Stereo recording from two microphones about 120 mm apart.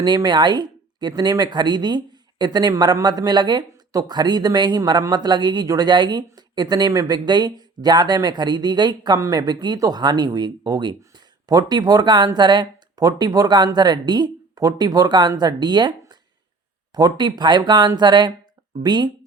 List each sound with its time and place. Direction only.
0.0 s speech: 35° right (ahead or behind)